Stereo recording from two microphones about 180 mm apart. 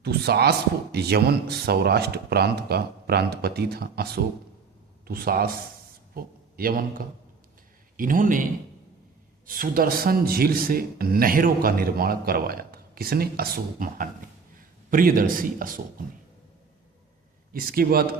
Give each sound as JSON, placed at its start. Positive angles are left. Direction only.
{"t": 0.0, "sound": "a man's voice", "side_deg": -65}
{"t": 9.5, "sound": "speech", "side_deg": -50}
{"t": 17.5, "sound": "speech", "side_deg": -55}